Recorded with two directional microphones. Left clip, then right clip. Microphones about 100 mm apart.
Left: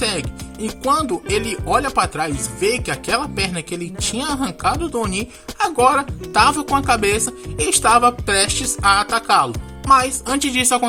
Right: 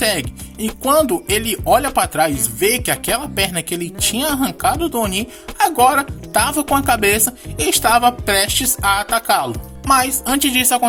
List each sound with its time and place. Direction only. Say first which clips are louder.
0.0 s music: right 3 dB; 45° right (ahead or behind)
0.9 s speech: right 3 dB; 60° right (ahead or behind)
7.3 s speech: right 2 dB; 35° right (ahead or behind)
8.4 s speech: right 2 dB; 55° right (ahead or behind)
8.8 s speech: left 3 dB; 40° right (ahead or behind)